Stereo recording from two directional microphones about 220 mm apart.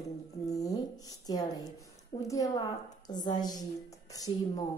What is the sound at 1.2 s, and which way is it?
A woman's voice, 15° left (ahead or behind).